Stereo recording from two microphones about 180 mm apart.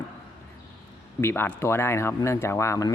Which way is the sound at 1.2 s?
15° left (ahead or behind).